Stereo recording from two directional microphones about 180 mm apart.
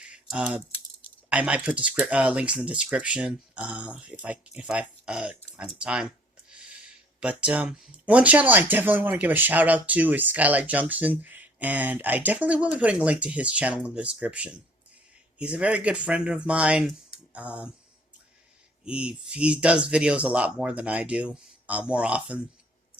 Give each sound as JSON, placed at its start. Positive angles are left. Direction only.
{"t": 0.1, "sound": "typing", "side_deg": -5}
{"t": 1.3, "sound": "speech", "side_deg": -5}
{"t": 7.2, "sound": "speech", "side_deg": -5}
{"t": 18.9, "sound": "speech", "side_deg": -5}